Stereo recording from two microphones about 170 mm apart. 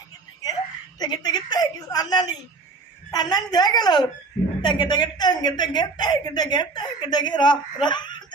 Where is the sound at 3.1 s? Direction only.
25° left (ahead or behind).